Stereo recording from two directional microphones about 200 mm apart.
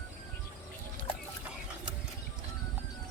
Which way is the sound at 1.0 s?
40° right (ahead or behind).